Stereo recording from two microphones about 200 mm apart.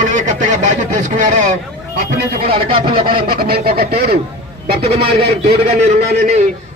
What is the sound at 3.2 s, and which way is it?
Speech, 50° right (ahead or behind).